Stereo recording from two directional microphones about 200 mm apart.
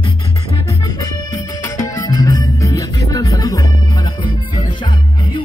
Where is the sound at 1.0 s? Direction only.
15° left (ahead or behind).